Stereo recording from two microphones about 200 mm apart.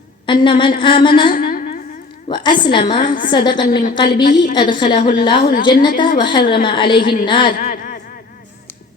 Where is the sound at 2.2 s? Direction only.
25° left (ahead or behind).